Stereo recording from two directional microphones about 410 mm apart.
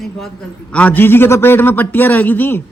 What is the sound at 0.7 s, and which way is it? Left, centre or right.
A man's voice, centre.